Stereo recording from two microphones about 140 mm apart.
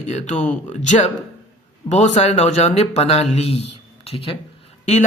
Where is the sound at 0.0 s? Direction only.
55° left (ahead or behind).